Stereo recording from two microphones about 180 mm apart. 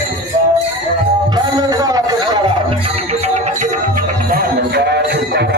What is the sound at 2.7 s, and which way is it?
Music, 35° right (ahead or behind).